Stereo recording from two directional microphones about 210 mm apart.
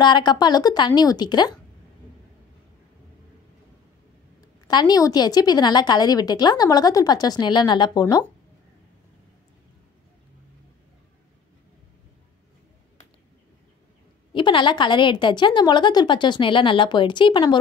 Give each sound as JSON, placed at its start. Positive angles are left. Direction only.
{"t": 0.0, "sound": "a woman's voice", "side_deg": 20}
{"t": 4.4, "sound": "a woman's voice", "side_deg": 20}
{"t": 14.3, "sound": "a woman's voice", "side_deg": 25}